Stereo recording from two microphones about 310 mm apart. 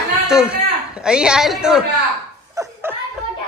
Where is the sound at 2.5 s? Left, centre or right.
Centre.